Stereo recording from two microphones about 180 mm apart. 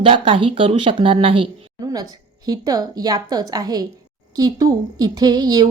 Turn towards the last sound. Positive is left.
turn(degrees=-20)  # may be behind; listen again after turning